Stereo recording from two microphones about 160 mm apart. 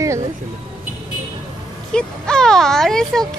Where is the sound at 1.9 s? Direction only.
5° left (ahead or behind).